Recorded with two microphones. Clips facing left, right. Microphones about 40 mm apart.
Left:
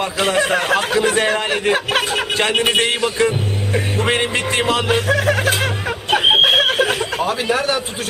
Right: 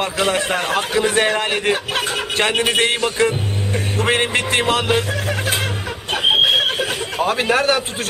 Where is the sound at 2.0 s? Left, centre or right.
Left.